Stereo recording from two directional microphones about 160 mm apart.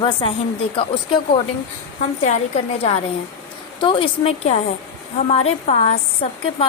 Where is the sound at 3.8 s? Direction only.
30° left (ahead or behind).